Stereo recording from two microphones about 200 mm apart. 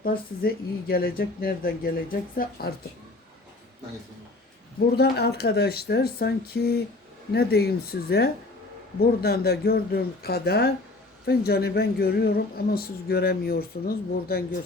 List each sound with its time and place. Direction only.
0.0 s speech: 45° left (ahead or behind)
4.9 s speech: 55° left (ahead or behind)